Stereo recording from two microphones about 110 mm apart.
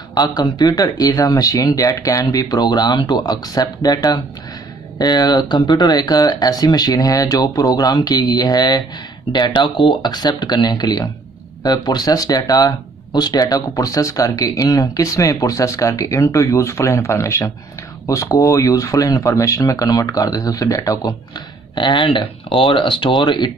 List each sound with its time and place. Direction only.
0.1 s speech: 35° left (ahead or behind)
21.7 s speech: 45° left (ahead or behind)